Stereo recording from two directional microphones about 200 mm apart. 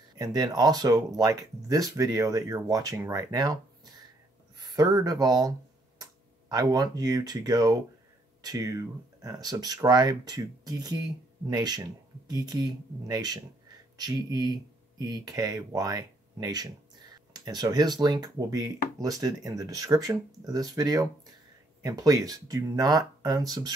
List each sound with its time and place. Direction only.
0.1 s speech: 20° right (ahead or behind)
6.5 s speech: 20° right (ahead or behind)